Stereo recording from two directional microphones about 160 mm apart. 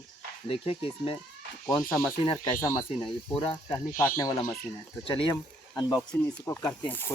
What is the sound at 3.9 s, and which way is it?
Speech, 60° left (ahead or behind).